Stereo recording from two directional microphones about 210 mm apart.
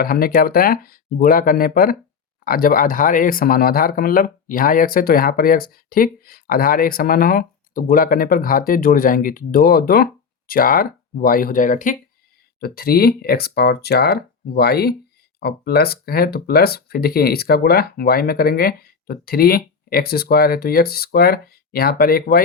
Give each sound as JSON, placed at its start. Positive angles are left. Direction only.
{"t": 0.0, "sound": "speech", "side_deg": 45}